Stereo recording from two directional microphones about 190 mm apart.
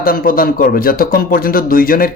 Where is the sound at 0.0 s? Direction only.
50° left (ahead or behind).